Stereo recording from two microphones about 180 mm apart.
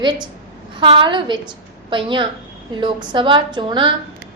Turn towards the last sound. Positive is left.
turn(degrees=-25)  # may be behind; listen again after turning